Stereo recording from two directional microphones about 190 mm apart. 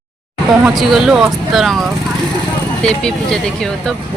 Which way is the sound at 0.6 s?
Centre (ahead or behind).